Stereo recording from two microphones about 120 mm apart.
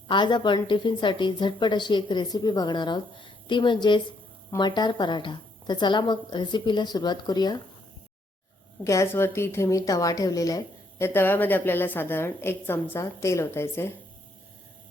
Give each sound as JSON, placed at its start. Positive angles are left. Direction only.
{"t": 0.1, "sound": "a woman's voice", "side_deg": 40}
{"t": 8.8, "sound": "a woman's voice", "side_deg": 25}